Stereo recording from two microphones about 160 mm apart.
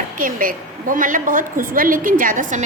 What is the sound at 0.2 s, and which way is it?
A woman's voice, 60° right (ahead or behind).